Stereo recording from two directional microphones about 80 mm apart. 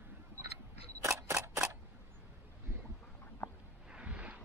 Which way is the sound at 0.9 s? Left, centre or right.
Right.